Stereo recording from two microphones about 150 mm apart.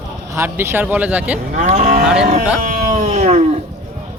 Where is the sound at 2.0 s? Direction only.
5° right (ahead or behind).